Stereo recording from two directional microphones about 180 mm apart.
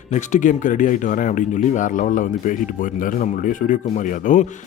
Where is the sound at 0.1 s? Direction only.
45° left (ahead or behind).